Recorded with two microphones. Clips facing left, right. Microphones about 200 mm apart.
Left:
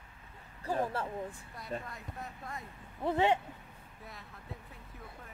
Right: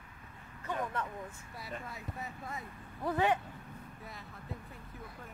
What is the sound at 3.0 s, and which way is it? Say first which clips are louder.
Speech: left 2 dB; 25° left (ahead or behind).